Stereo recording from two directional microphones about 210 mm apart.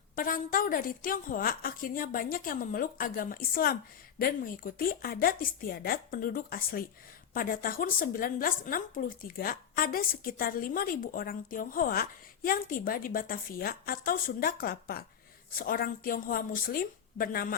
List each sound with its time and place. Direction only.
0.2 s a woman's voice: 40° left (ahead or behind)